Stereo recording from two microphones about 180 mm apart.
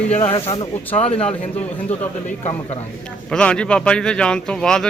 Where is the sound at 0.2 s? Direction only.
30° left (ahead or behind).